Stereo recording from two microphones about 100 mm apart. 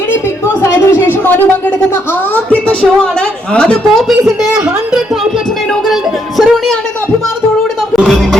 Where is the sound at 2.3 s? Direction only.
10° left (ahead or behind).